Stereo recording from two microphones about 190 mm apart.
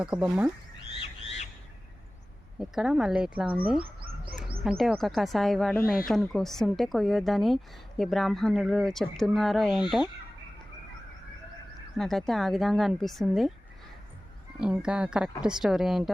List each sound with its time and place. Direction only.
0.0 s speech: 5° right (ahead or behind)
0.8 s frog: 30° left (ahead or behind)
2.6 s speech: centre (ahead or behind)
4.8 s speech: centre (ahead or behind)
11.9 s speech: centre (ahead or behind)
14.6 s speech: 5° right (ahead or behind)